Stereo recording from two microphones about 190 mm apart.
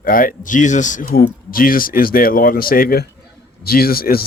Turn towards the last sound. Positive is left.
turn(degrees=50)  # may be behind; listen again after turning